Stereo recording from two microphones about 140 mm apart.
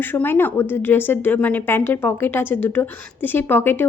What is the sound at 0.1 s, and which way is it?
A woman's voice, 15° left (ahead or behind).